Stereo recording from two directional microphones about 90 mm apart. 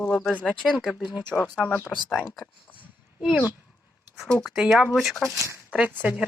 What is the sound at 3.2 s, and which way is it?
Speech, centre (ahead or behind).